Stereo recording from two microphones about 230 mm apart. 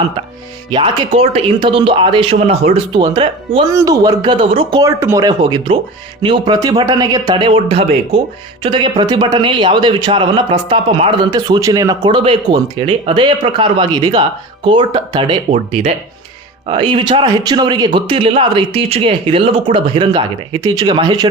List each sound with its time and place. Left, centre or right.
0.7 s a man's voice: right